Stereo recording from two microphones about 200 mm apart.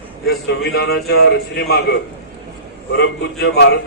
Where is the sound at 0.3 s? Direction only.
55° left (ahead or behind).